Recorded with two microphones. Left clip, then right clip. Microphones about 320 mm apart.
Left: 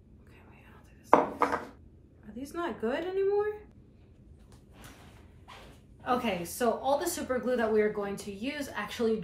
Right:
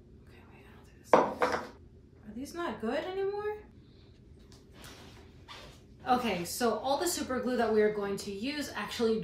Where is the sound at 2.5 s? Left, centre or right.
Centre.